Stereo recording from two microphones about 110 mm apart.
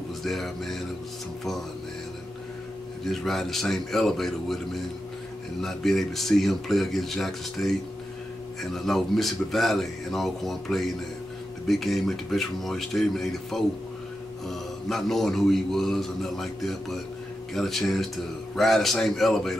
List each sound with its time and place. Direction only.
0.2 s a man's voice: centre (ahead or behind)
3.1 s a man's voice: centre (ahead or behind)